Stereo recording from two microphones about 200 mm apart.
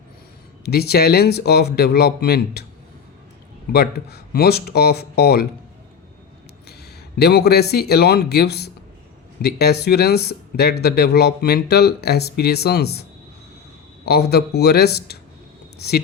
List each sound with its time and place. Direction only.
0.6 s speech: 55° left (ahead or behind)
3.7 s speech: 50° left (ahead or behind)
7.2 s speech: 50° left (ahead or behind)